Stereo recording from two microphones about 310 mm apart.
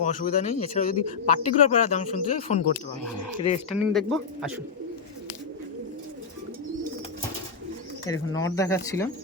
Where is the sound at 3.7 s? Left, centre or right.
Centre.